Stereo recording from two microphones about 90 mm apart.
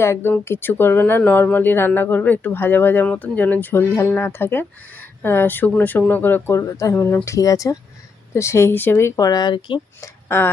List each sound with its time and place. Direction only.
0.0 s speech: 25° left (ahead or behind)
9.2 s speech: 50° left (ahead or behind)
10.0 s speech: 25° left (ahead or behind)